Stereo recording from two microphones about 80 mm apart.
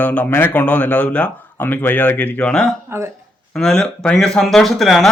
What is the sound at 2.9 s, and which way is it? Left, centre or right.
Speech, right.